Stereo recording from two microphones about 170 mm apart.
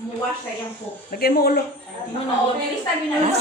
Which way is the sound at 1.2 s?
65° left (ahead or behind).